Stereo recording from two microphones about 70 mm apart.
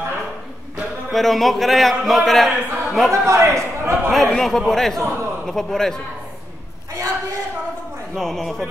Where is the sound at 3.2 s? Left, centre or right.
Right.